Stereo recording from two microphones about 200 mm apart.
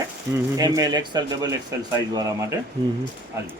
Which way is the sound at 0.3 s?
15° right (ahead or behind).